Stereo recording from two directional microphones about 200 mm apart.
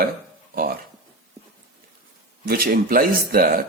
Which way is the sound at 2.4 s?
50° right (ahead or behind).